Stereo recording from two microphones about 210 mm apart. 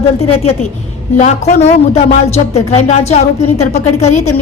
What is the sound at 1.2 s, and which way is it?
Music, 35° left (ahead or behind).